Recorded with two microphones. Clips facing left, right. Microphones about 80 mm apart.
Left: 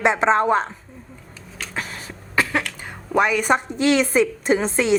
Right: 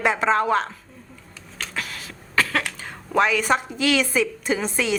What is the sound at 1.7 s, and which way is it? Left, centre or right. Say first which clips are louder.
Cough: left 3 dB; left.